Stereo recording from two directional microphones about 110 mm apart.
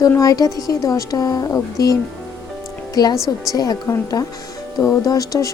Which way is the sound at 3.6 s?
30° left (ahead or behind).